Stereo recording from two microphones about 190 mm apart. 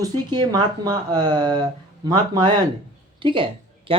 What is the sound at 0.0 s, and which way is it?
Speech, 20° right (ahead or behind).